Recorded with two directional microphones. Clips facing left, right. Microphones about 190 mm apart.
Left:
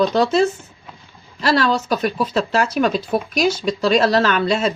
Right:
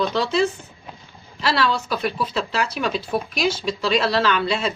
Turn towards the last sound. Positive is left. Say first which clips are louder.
# left 4 dB
turn(degrees=45)  # may be behind; listen again after turning